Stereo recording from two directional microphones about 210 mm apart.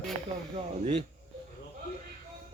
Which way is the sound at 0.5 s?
30° right (ahead or behind).